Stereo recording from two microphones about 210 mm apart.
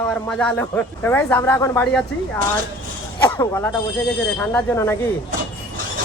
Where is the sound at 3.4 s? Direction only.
15° left (ahead or behind).